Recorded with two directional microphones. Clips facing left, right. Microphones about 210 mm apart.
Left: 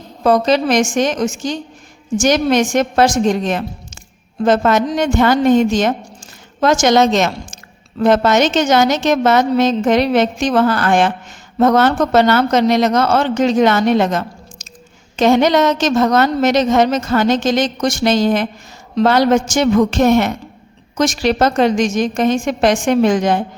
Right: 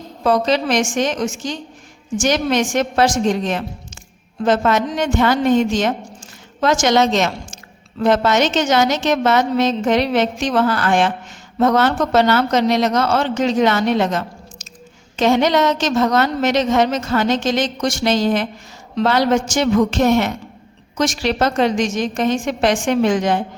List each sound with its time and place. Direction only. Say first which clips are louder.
0.3 s a woman's voice: left 3 dB; 45° left (ahead or behind)